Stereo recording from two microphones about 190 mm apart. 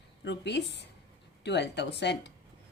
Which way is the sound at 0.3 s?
60° left (ahead or behind).